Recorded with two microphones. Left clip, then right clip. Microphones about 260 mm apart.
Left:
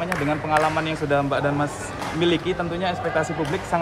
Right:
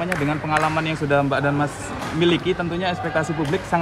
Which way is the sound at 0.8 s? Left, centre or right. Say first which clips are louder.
Right 2 dB; right.